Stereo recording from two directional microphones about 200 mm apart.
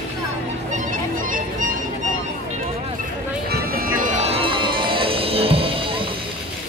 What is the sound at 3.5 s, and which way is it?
Music, 45° right (ahead or behind).